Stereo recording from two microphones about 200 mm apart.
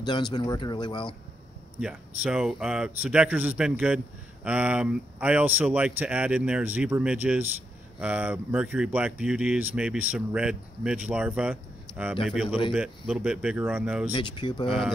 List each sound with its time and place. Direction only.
0.0 s speech: 20° left (ahead or behind)
1.8 s speech: 5° right (ahead or behind)
14.1 s speech: 25° left (ahead or behind)